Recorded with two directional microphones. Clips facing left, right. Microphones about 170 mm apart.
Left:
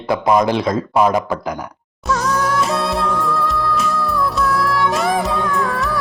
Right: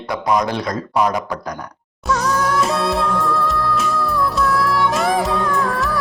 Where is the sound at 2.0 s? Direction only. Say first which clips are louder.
Even; centre (ahead or behind).